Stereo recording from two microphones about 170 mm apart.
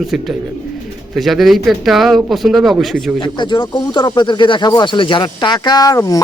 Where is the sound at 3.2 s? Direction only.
25° left (ahead or behind).